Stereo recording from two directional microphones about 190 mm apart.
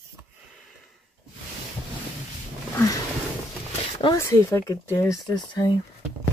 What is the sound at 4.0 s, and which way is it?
Speech, 20° left (ahead or behind).